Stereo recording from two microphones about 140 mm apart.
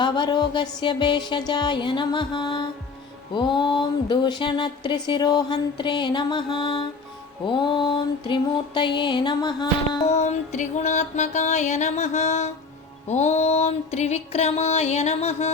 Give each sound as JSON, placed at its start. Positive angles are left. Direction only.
{"t": 0.0, "sound": "speech", "side_deg": 35}
{"t": 10.1, "sound": "music", "side_deg": 55}